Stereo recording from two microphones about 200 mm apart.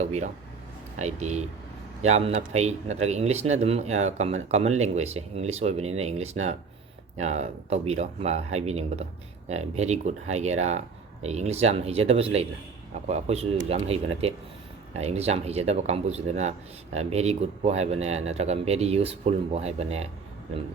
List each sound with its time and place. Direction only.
0.0 s speech: 35° right (ahead or behind)